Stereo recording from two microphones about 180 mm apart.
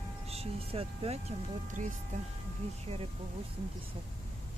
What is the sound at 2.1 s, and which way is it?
Speech, 45° right (ahead or behind).